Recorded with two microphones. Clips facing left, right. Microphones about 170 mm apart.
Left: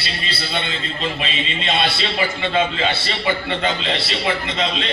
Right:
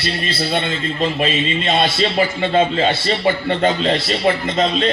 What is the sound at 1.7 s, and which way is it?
Speech, 45° right (ahead or behind).